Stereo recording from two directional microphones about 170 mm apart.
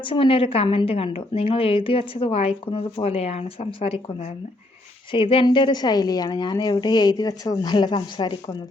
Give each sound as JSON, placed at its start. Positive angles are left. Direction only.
{"t": 0.0, "sound": "a woman's voice", "side_deg": 30}